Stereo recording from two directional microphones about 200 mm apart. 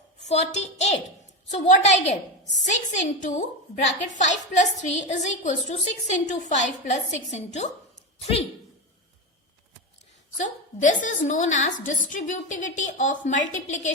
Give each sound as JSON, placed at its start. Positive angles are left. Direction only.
{"t": 0.3, "sound": "a woman's voice", "side_deg": 35}
{"t": 10.3, "sound": "a woman's voice", "side_deg": 40}